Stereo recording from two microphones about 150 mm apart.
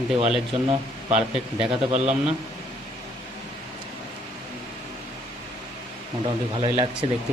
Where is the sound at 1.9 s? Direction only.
45° right (ahead or behind).